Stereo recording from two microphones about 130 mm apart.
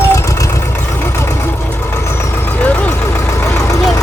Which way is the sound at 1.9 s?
15° left (ahead or behind).